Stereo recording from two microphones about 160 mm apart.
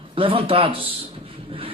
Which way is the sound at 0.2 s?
35° right (ahead or behind).